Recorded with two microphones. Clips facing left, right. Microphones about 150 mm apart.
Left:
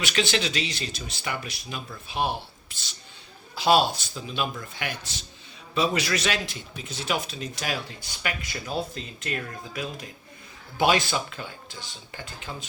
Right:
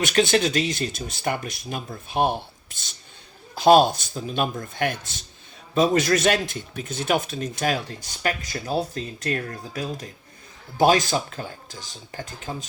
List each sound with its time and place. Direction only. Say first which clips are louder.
0.0 s a man's voice: right 6 dB; 50° right (ahead or behind)